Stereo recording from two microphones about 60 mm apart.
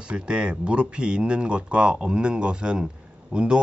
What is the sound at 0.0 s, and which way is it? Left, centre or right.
Speech, centre.